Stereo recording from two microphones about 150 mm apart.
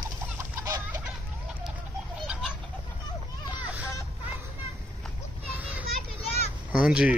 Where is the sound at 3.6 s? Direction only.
20° left (ahead or behind).